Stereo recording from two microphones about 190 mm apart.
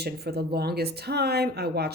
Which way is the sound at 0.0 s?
55° right (ahead or behind).